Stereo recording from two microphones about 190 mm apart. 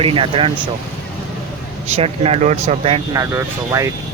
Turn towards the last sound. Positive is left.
turn(degrees=-15)  # may be behind; listen again after turning